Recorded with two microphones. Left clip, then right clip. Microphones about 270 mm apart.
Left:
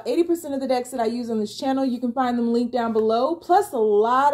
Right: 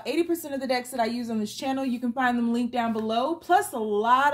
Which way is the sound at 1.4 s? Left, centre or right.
Right.